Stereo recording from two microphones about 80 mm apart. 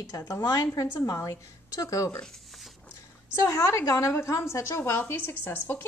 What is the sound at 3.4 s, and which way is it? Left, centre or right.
A woman's voice, left.